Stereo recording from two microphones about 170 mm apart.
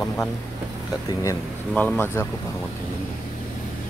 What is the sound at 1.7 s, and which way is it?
Speech, 10° left (ahead or behind).